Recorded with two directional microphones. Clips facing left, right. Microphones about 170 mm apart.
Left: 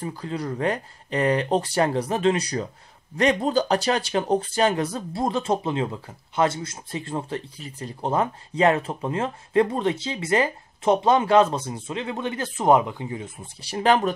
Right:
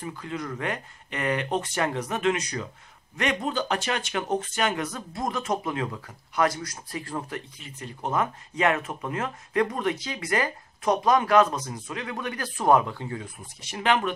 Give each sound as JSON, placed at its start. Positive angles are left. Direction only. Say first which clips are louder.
{"t": 0.0, "sound": "speech", "louder": "left 4 dB", "side_deg": 35}